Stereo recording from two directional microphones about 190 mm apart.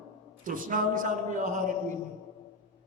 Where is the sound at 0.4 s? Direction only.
45° right (ahead or behind).